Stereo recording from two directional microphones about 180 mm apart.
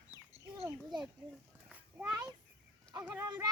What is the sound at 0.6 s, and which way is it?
Speech, 25° right (ahead or behind).